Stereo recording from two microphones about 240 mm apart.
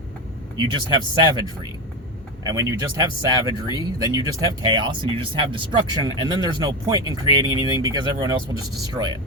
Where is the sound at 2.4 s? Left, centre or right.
Centre.